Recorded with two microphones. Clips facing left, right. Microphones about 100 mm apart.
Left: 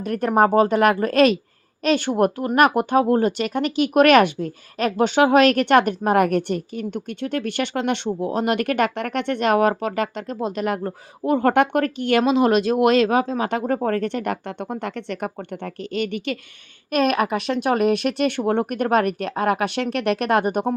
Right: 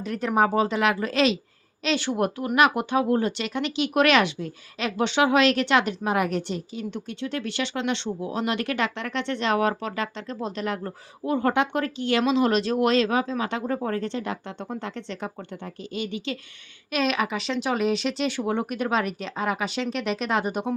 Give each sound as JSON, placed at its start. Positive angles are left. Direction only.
{"t": 0.0, "sound": "a woman's voice", "side_deg": 50}
{"t": 16.9, "sound": "speech", "side_deg": 50}